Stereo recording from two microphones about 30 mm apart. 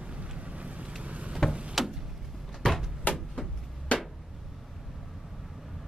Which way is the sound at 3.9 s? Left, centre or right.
Left.